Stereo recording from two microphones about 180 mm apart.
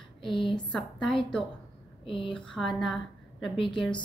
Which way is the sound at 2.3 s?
5° left (ahead or behind).